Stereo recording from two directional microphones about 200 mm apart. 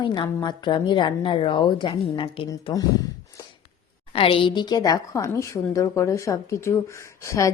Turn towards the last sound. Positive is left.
turn(degrees=15)  # may be behind; listen again after turning